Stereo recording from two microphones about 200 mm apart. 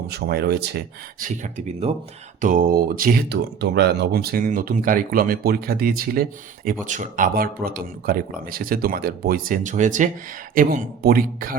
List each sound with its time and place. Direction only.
0.1 s speech: 55° right (ahead or behind)
1.2 s speech: 40° right (ahead or behind)
6.8 s speech: 40° right (ahead or behind)